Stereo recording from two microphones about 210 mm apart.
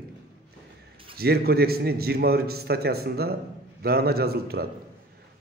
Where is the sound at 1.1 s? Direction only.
45° right (ahead or behind).